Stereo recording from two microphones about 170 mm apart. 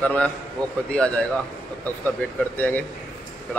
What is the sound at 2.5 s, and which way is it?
Speech, 10° left (ahead or behind).